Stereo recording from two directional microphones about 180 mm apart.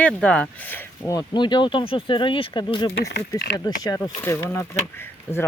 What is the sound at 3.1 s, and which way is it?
Speech, 65° left (ahead or behind).